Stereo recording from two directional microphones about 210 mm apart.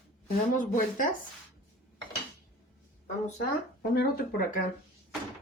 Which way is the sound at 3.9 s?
45° left (ahead or behind).